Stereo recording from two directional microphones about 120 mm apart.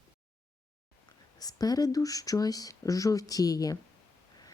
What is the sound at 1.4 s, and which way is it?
A woman's voice, 30° left (ahead or behind).